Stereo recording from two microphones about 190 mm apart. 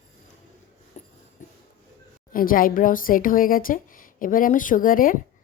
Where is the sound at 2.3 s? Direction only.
50° left (ahead or behind).